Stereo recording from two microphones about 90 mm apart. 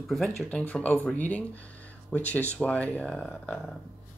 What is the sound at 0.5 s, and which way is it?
Speech, 15° left (ahead or behind).